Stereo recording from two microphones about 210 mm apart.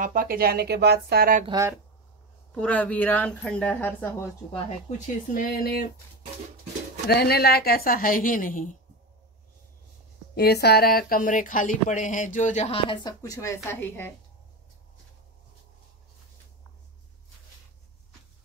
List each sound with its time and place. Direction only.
0.0 s speech: 40° right (ahead or behind)
1.5 s speech: 15° right (ahead or behind)
2.5 s a woman's voice: 5° left (ahead or behind)
4.5 s speech: 35° left (ahead or behind)
7.1 s a woman's voice: 50° left (ahead or behind)
10.3 s speech: 50° left (ahead or behind); by 14.1 s 10° left (ahead or behind)